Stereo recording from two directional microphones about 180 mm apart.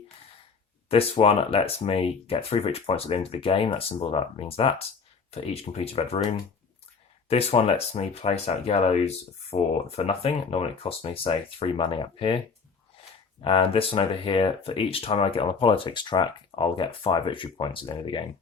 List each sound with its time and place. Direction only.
0.9 s speech: 35° left (ahead or behind)
7.3 s speech: 35° left (ahead or behind)
13.4 s speech: 30° left (ahead or behind)